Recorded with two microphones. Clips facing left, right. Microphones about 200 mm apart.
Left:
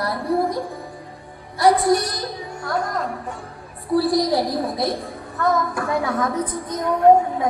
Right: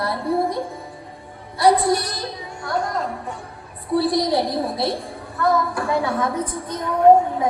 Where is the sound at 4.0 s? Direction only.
25° right (ahead or behind).